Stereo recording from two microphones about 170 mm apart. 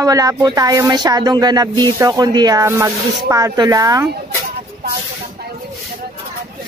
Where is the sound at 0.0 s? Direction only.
20° right (ahead or behind).